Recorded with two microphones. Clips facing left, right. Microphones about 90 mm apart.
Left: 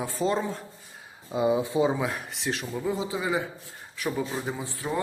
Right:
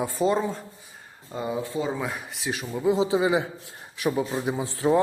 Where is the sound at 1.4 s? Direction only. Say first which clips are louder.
Left 5 dB; 20° left (ahead or behind).